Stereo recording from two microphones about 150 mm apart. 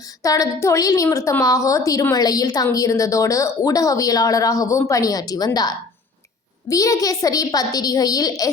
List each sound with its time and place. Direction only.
0.2 s speech: 20° left (ahead or behind)